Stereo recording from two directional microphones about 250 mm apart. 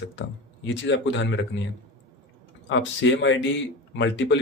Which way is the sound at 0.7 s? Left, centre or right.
Left.